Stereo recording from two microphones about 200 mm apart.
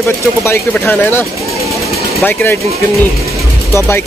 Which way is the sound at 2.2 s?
10° left (ahead or behind).